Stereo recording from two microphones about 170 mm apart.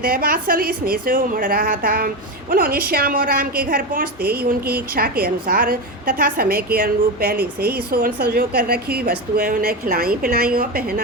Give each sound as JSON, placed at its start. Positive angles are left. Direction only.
{"t": 0.0, "sound": "a woman's voice", "side_deg": -60}